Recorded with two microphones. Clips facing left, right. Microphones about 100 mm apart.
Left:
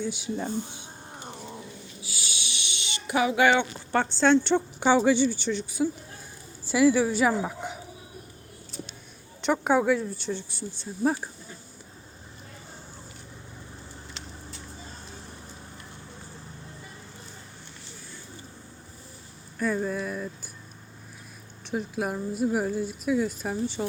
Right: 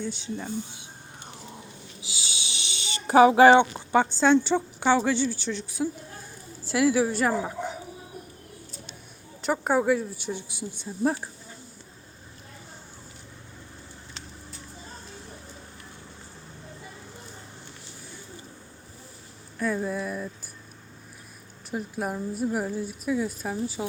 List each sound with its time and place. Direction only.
0.0 s speech: 10° left (ahead or behind)
2.0 s snoring: 20° right (ahead or behind)
2.6 s a sound: 35° right (ahead or behind)
3.9 s a woman's voice: 5° right (ahead or behind)
9.4 s a woman's voice: centre (ahead or behind)
11.0 s a woman's voice: centre (ahead or behind)
19.5 s a woman's voice: centre (ahead or behind)
21.7 s a woman's voice: centre (ahead or behind)